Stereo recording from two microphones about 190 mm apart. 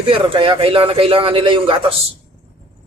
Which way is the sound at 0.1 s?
25° right (ahead or behind).